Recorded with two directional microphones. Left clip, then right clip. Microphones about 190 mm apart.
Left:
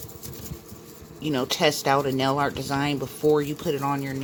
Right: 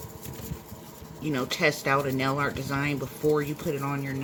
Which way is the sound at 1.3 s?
35° left (ahead or behind).